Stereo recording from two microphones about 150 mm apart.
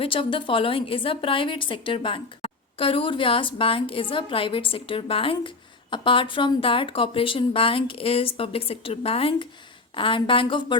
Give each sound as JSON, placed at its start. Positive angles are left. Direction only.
{"t": 0.0, "sound": "a woman's voice", "side_deg": 35}